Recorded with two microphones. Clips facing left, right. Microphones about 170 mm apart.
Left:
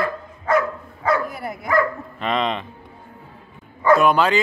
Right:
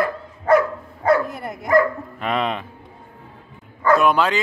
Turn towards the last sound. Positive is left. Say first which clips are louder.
# left 1 dB
turn(degrees=0)  # may be behind; listen again after turning